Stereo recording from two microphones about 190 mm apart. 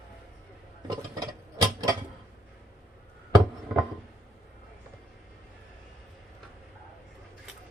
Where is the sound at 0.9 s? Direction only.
20° right (ahead or behind).